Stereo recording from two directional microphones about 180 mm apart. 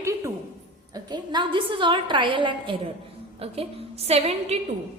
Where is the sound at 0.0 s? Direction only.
15° right (ahead or behind).